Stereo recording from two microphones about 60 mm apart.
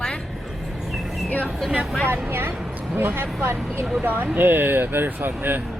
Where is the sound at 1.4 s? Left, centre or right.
Centre.